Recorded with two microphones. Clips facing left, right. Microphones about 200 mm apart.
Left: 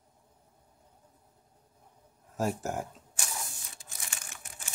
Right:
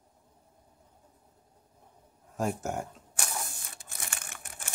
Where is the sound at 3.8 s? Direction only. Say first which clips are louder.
Right 4 dB; 55° right (ahead or behind).